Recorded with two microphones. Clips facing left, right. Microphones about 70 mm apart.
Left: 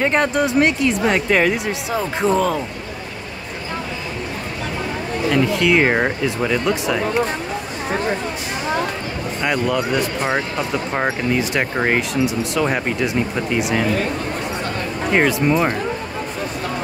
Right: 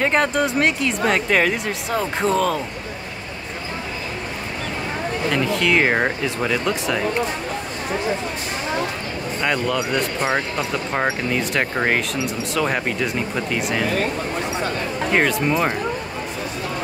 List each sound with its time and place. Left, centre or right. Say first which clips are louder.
0.0 s speech: left 1 dB; centre
5.5 s speech: even; centre
9.4 s speech: left 2 dB; centre
15.1 s speech: left 3 dB; centre